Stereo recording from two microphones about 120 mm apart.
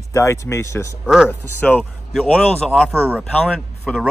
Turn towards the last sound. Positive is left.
turn(degrees=0)  # may be behind; listen again after turning